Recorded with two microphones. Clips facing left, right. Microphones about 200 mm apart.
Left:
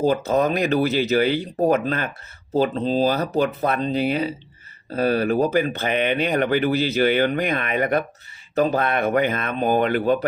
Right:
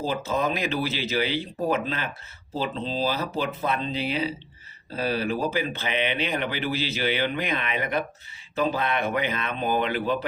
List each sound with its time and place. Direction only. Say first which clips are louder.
0.0 s speech: left 7 dB; 45° left (ahead or behind)